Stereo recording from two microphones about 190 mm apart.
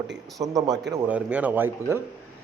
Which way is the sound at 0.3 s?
20° right (ahead or behind).